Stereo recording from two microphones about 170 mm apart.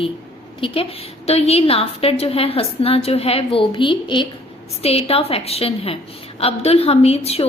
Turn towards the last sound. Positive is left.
turn(degrees=35)  # may be behind; listen again after turning